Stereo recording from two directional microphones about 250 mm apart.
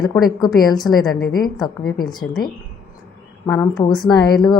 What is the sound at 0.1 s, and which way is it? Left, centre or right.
A woman's voice, centre.